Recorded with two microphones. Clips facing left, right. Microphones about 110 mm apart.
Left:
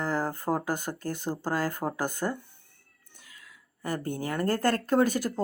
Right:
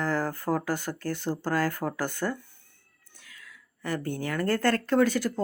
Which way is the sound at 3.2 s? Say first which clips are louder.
Right 3 dB; 40° left (ahead or behind).